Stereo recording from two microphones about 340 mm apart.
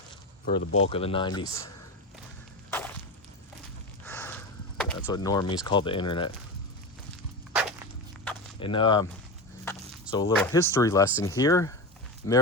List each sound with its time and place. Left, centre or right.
0.4 s speech: left
0.8 s speech: centre
2.6 s whip: centre
4.0 s a sound: centre
8.5 s speech: centre